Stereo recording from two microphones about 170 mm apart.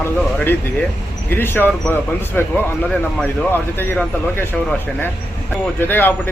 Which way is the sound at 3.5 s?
10° left (ahead or behind).